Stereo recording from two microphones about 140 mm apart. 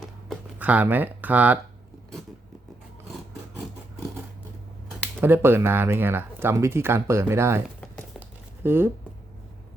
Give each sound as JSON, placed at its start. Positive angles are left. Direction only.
{"t": 0.6, "sound": "speech", "side_deg": -10}
{"t": 5.2, "sound": "speech", "side_deg": -15}
{"t": 8.6, "sound": "speech", "side_deg": -15}